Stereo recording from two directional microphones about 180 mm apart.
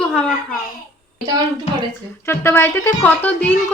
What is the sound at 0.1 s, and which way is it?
Speech, centre (ahead or behind).